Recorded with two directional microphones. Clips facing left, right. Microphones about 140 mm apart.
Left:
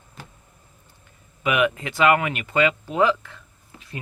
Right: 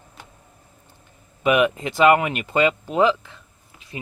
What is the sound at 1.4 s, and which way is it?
Speech, 30° right (ahead or behind).